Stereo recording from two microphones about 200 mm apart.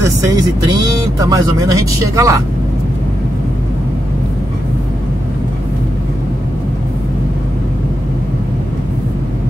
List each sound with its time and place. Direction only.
0.0 s speech: 20° right (ahead or behind)